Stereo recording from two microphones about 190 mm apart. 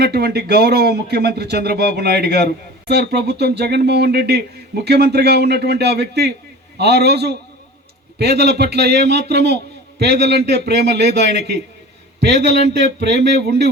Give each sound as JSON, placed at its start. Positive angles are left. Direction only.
{"t": 0.0, "sound": "speech", "side_deg": -55}